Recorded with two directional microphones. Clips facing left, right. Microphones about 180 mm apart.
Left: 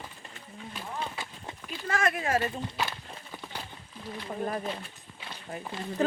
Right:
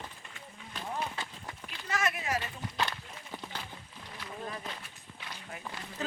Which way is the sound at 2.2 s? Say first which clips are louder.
Left 7 dB; 50° left (ahead or behind).